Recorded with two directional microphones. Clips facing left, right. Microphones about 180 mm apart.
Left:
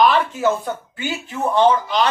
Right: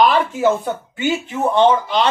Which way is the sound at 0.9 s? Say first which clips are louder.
Right 6 dB; 20° right (ahead or behind).